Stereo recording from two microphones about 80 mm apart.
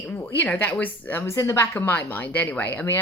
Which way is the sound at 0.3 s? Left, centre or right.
Left.